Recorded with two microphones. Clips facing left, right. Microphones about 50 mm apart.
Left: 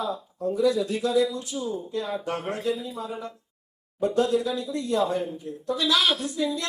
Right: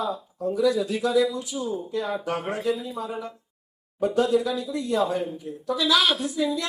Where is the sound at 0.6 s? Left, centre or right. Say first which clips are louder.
Right 1 dB; centre.